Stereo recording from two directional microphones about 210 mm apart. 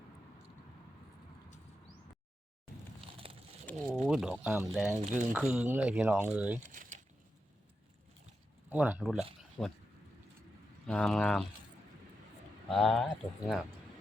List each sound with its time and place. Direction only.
3.2 s a sound: 25° right (ahead or behind)
3.7 s speech: 5° left (ahead or behind)
4.9 s speech: 30° right (ahead or behind)
5.3 s speech: 5° right (ahead or behind)
6.6 s speech: 35° right (ahead or behind)
8.7 s speech: 5° right (ahead or behind)
9.4 s a sound: centre (ahead or behind)
10.8 s speech: 5° left (ahead or behind)
12.7 s speech: centre (ahead or behind)